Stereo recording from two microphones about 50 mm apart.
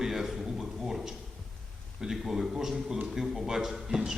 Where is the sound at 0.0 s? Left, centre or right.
Centre.